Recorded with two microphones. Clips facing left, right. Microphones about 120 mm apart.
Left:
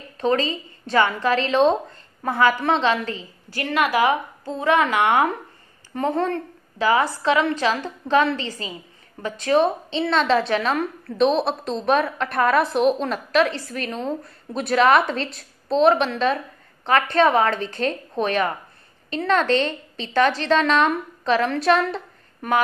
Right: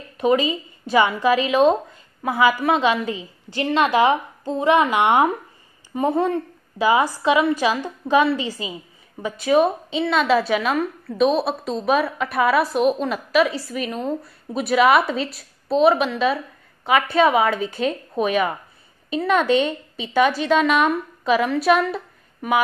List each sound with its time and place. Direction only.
0.2 s a woman's voice: 10° right (ahead or behind)